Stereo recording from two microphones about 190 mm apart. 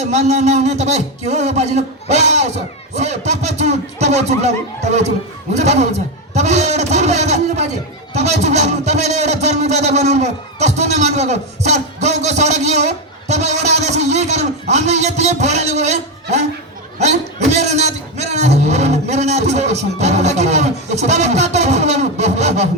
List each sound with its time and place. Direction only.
0.0 s a man's voice: 35° right (ahead or behind)
17.0 s speech: 35° right (ahead or behind)